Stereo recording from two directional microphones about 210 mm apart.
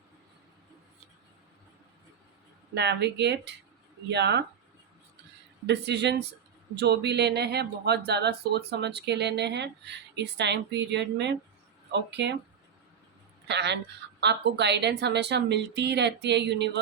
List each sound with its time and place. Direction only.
2.7 s speech: 55° right (ahead or behind)
5.6 s a woman's voice: 55° right (ahead or behind)
13.5 s a woman's voice: 55° right (ahead or behind)